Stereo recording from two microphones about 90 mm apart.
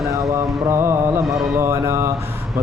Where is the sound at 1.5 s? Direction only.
35° right (ahead or behind).